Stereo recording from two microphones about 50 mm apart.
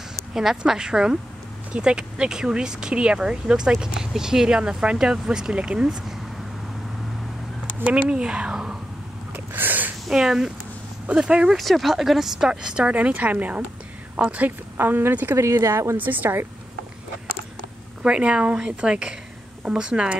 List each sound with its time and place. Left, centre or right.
0.3 s speech: centre
5.6 s speech: right
5.9 s speech: centre
7.8 s speech: right
9.3 s a sound: right
10.0 s speech: centre
11.5 s speech: centre
12.8 s speech: right
14.8 s speech: right
15.3 s speech: right
16.0 s speech: right
18.0 s speech: right